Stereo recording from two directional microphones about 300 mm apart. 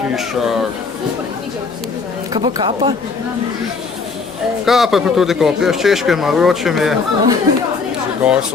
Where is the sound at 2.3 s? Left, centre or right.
Centre.